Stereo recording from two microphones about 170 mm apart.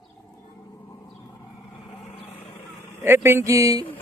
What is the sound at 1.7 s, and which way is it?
Vehicle, 25° left (ahead or behind).